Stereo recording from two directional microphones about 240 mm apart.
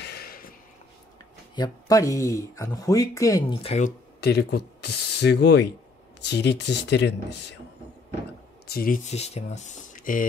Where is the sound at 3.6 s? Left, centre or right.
Left.